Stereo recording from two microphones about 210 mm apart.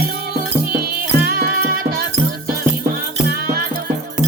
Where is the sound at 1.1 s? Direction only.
45° right (ahead or behind).